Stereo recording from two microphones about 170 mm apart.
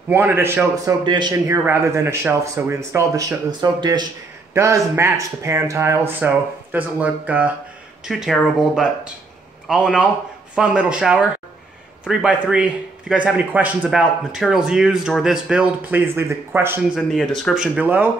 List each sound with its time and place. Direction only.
0.1 s speech: 15° right (ahead or behind)
1.0 s speech: 25° right (ahead or behind)
1.5 s speech: 15° right (ahead or behind)
16.9 s speech: centre (ahead or behind)